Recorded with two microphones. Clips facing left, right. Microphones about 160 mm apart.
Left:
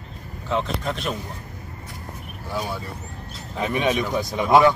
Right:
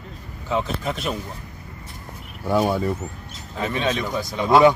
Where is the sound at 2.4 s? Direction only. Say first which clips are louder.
Right 9 dB; 60° right (ahead or behind).